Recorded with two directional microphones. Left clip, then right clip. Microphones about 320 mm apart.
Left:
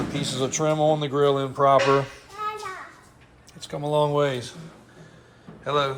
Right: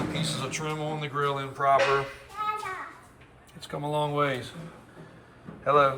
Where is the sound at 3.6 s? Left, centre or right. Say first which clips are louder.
Left 6 dB; centre.